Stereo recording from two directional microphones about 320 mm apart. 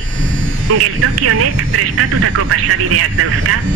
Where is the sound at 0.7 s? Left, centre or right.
Right.